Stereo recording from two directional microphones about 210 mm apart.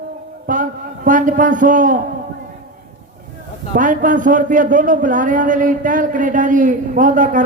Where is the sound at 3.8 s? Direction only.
40° right (ahead or behind).